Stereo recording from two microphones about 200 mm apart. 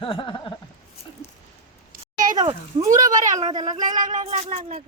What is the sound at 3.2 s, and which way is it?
Speech, 35° right (ahead or behind).